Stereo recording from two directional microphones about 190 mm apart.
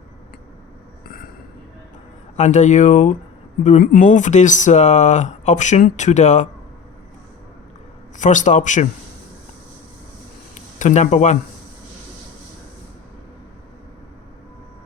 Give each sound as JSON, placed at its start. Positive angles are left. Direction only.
{"t": 2.3, "sound": "speech", "side_deg": 40}
{"t": 8.2, "sound": "speech", "side_deg": 40}
{"t": 10.5, "sound": "speech", "side_deg": 40}